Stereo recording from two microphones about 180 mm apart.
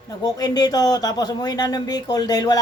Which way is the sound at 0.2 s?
20° left (ahead or behind).